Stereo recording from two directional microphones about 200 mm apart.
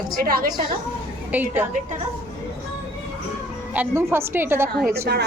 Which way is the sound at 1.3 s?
10° right (ahead or behind).